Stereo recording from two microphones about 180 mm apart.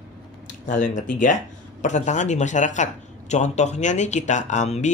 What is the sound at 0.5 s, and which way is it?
Speech, 45° left (ahead or behind).